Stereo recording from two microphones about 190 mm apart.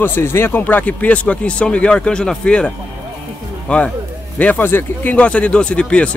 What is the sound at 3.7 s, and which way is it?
Speech, 5° left (ahead or behind).